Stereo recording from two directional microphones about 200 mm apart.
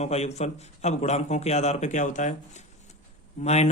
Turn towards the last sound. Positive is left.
turn(degrees=35)  # may be behind; listen again after turning